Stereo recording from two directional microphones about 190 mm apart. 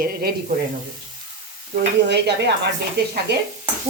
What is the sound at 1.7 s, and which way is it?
Stir, 60° right (ahead or behind).